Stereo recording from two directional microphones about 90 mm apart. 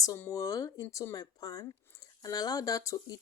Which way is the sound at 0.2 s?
35° left (ahead or behind).